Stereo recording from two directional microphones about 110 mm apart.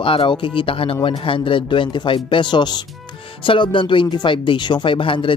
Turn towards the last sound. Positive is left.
turn(degrees=50)  # may be behind; listen again after turning